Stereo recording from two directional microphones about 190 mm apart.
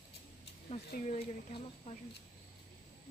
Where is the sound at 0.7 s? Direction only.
35° left (ahead or behind).